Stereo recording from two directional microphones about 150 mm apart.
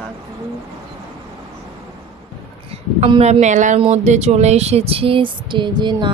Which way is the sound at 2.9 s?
40° right (ahead or behind).